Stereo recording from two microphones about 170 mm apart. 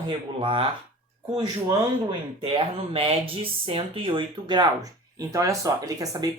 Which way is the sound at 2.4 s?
35° right (ahead or behind).